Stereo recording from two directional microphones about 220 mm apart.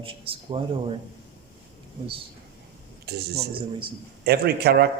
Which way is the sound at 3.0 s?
45° right (ahead or behind).